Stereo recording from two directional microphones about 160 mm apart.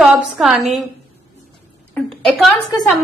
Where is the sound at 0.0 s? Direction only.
Centre (ahead or behind).